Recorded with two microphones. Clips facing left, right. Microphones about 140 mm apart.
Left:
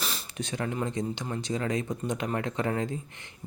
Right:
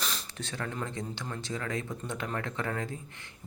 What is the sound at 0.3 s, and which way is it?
Speech, 15° left (ahead or behind).